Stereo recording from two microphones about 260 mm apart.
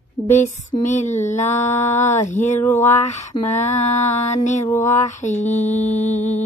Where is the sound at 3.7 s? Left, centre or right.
Left.